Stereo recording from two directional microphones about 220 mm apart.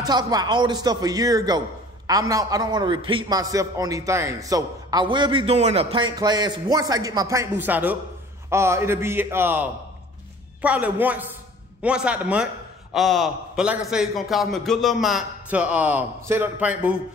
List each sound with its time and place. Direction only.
0.0 s a man's voice: 20° right (ahead or behind)